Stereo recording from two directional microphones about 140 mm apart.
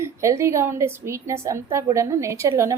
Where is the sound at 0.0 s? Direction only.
20° right (ahead or behind).